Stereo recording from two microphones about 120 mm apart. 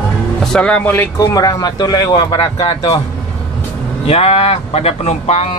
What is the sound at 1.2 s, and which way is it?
Speech, 30° left (ahead or behind).